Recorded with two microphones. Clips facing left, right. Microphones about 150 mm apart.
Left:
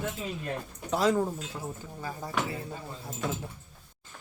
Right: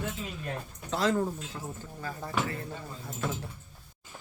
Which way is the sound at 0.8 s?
10° left (ahead or behind).